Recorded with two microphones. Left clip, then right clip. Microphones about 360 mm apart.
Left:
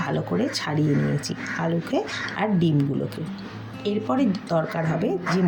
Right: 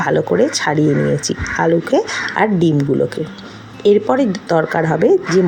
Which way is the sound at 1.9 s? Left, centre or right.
Centre.